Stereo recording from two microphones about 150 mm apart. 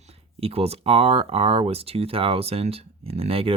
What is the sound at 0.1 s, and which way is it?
Speech, 40° right (ahead or behind).